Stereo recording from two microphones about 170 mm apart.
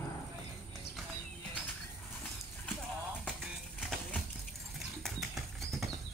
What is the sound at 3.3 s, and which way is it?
Music, 5° left (ahead or behind).